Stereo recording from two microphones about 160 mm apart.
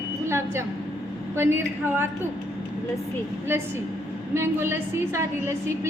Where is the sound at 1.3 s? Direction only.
15° right (ahead or behind).